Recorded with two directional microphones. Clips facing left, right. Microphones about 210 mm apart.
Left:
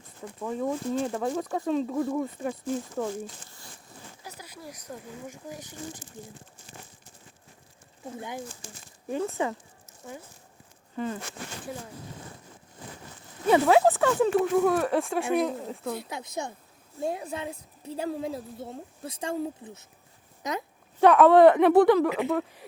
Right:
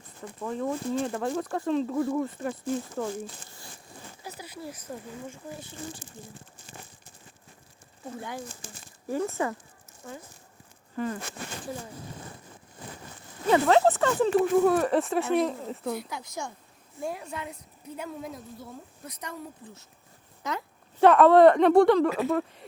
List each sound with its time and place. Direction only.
0.3 s speech: 5° left (ahead or behind)
4.3 s speech: 10° right (ahead or behind)
5.2 s speech: 15° left (ahead or behind)
9.0 s a woman's voice: 20° left (ahead or behind)
10.9 s speech: 25° left (ahead or behind)
13.5 s speech: 10° left (ahead or behind)
15.9 s a woman's voice: 25° left (ahead or behind)
21.0 s speech: centre (ahead or behind)